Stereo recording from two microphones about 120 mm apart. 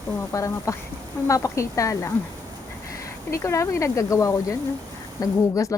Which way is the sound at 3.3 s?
25° left (ahead or behind).